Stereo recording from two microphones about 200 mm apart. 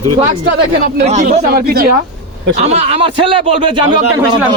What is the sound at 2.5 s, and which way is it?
A man's voice, 35° right (ahead or behind).